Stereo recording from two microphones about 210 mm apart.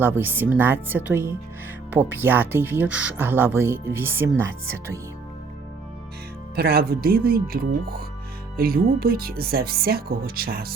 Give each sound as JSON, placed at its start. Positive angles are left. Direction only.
{"t": 0.0, "sound": "speech", "side_deg": -10}
{"t": 6.6, "sound": "speech", "side_deg": -45}